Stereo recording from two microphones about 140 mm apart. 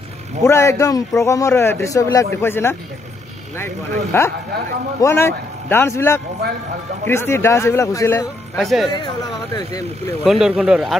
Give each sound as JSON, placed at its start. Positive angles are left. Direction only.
{"t": 0.4, "sound": "a man's voice", "side_deg": 20}
{"t": 4.1, "sound": "a man's voice", "side_deg": 15}
{"t": 8.5, "sound": "speech", "side_deg": 0}
{"t": 8.9, "sound": "speech", "side_deg": 30}
{"t": 10.2, "sound": "speech", "side_deg": -5}